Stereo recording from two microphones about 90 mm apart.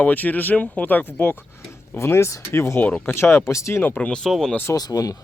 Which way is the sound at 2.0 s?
30° left (ahead or behind).